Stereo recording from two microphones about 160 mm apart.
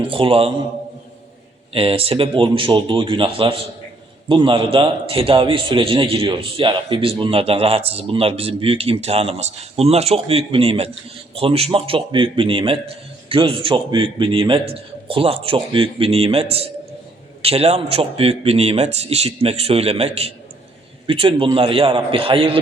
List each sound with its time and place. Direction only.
0.1 s a man's voice: 35° right (ahead or behind)
1.7 s a man's voice: 35° right (ahead or behind)